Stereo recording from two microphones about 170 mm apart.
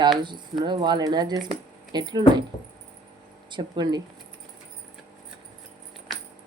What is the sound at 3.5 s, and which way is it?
Speech, 25° right (ahead or behind).